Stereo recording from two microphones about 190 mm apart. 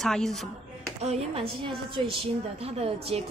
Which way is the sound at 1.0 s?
35° right (ahead or behind).